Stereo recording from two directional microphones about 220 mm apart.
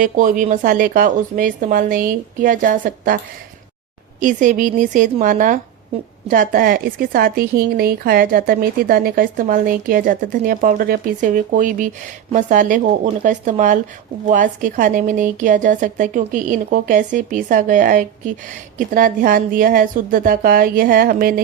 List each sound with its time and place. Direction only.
0.0 s speech: 35° right (ahead or behind)
4.2 s speech: 35° right (ahead or behind)